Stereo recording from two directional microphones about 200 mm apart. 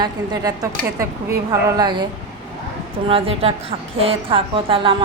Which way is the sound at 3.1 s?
30° right (ahead or behind).